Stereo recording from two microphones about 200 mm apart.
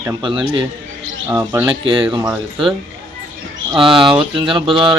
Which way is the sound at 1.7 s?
25° right (ahead or behind).